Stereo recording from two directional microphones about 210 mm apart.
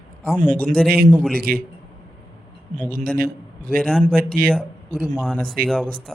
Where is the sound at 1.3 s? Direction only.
45° right (ahead or behind).